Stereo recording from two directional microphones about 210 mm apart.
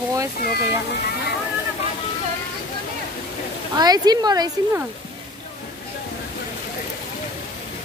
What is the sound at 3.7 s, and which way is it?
Speech, 20° right (ahead or behind).